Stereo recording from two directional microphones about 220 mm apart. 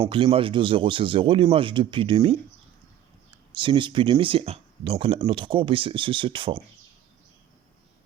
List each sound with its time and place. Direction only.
0.1 s speech: 25° right (ahead or behind)
3.5 s speech: 20° right (ahead or behind)